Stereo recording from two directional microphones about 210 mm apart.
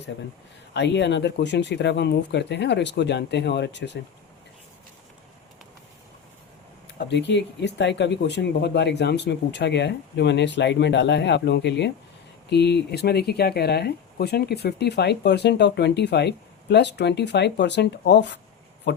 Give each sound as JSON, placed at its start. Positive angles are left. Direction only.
{"t": 0.7, "sound": "speech", "side_deg": 55}
{"t": 7.0, "sound": "speech", "side_deg": 55}